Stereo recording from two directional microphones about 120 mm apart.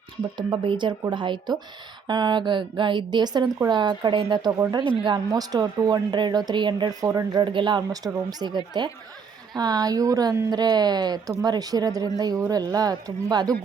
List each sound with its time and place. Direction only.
0.2 s speech: 40° right (ahead or behind)